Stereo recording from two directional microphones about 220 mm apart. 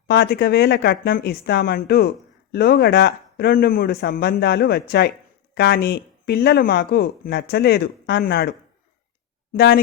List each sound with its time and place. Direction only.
0.1 s speech: 45° left (ahead or behind)